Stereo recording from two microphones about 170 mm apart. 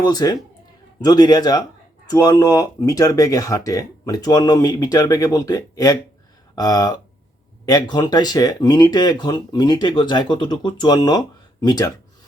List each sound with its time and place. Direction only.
0.0 s speech: 20° left (ahead or behind)